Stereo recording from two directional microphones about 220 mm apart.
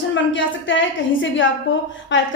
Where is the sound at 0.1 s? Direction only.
55° left (ahead or behind).